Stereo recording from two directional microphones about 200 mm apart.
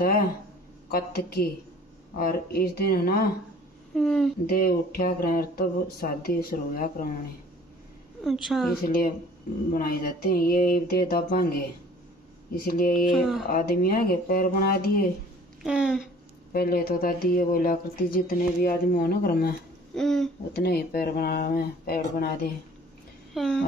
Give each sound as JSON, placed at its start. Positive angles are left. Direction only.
{"t": 0.8, "sound": "speech", "side_deg": 50}
{"t": 3.9, "sound": "a woman's voice", "side_deg": 5}
{"t": 4.5, "sound": "speech", "side_deg": 50}
{"t": 8.2, "sound": "a woman's voice", "side_deg": 0}
{"t": 8.8, "sound": "speech", "side_deg": 45}
{"t": 13.1, "sound": "a woman's voice", "side_deg": 0}
{"t": 13.5, "sound": "speech", "side_deg": 45}
{"t": 15.6, "sound": "a woman's voice", "side_deg": -5}
{"t": 16.5, "sound": "speech", "side_deg": 50}
{"t": 20.0, "sound": "a woman's voice", "side_deg": 0}
{"t": 20.5, "sound": "speech", "side_deg": 50}
{"t": 23.3, "sound": "a sound", "side_deg": 0}